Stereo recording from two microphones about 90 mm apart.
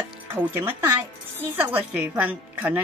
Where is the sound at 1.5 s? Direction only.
15° right (ahead or behind).